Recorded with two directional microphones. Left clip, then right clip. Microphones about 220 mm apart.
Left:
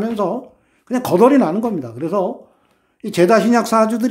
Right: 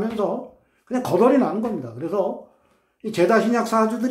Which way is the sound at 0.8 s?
45° left (ahead or behind).